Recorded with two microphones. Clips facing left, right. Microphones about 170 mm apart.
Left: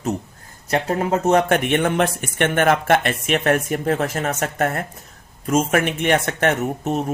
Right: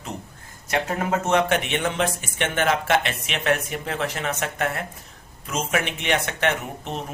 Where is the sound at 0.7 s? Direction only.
35° left (ahead or behind).